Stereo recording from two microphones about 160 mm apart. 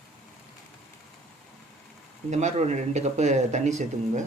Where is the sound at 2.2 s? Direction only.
45° right (ahead or behind).